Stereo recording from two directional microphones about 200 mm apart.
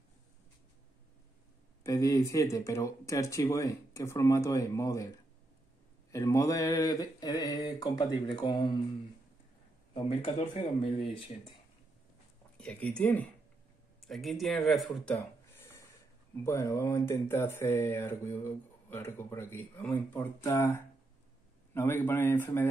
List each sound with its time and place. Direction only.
1.8 s speech: 15° left (ahead or behind)
6.1 s mantra: 15° left (ahead or behind)
9.9 s mantra: 30° left (ahead or behind)
12.5 s speech: 5° left (ahead or behind)
16.4 s speech: 15° left (ahead or behind)